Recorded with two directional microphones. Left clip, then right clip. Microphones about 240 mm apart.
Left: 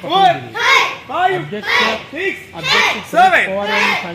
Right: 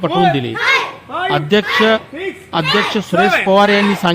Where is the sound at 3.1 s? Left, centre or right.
Centre.